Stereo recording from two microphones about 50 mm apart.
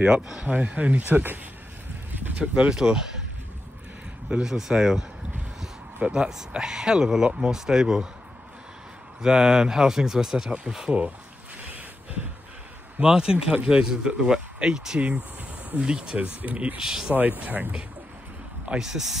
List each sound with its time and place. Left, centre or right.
0.0 s speech: centre
2.3 s speech: right
4.3 s speech: centre
6.0 s speech: centre
7.5 s speech: centre
9.2 s speech: centre
13.0 s speech: centre
15.0 s speech: right
16.8 s speech: centre
17.1 s speech: right
18.7 s speech: centre